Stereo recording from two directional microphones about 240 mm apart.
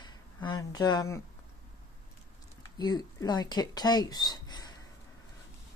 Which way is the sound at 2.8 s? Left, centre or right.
Centre.